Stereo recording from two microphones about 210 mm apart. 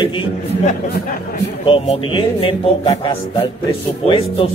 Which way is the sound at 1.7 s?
25° left (ahead or behind).